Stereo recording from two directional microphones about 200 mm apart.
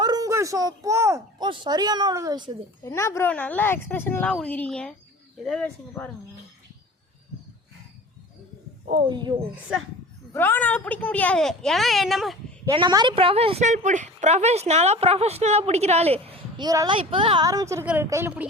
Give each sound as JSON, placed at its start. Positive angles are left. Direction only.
{"t": 0.0, "sound": "a sound", "side_deg": -20}
{"t": 1.5, "sound": "a woman's voice", "side_deg": -20}
{"t": 2.8, "sound": "speech", "side_deg": 15}
{"t": 8.9, "sound": "a woman's voice", "side_deg": -20}
{"t": 10.3, "sound": "speech", "side_deg": 10}
{"t": 12.7, "sound": "a woman's voice", "side_deg": -20}